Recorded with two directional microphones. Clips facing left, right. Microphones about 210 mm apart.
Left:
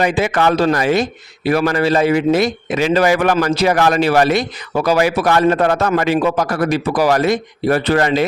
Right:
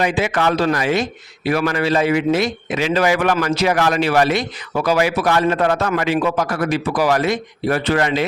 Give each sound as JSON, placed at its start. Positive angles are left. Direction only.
{"t": 0.0, "sound": "speech", "side_deg": 40}